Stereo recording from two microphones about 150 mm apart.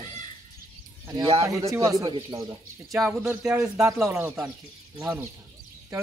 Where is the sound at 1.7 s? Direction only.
20° right (ahead or behind).